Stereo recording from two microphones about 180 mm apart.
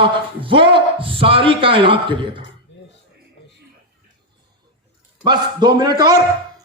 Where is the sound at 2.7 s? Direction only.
80° left.